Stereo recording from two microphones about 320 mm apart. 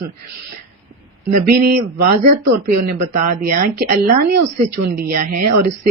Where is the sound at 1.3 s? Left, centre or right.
Right.